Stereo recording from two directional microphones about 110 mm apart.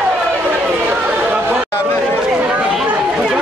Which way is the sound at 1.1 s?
15° right (ahead or behind).